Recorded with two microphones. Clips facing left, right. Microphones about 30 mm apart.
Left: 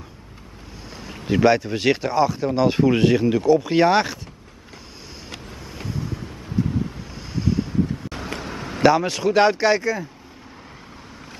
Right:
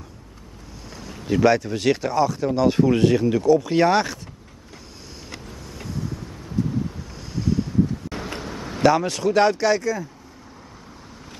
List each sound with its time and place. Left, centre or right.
0.8 s speech: centre
5.9 s vehicle: centre
7.2 s wind: centre
8.4 s a sound: centre
8.8 s speech: centre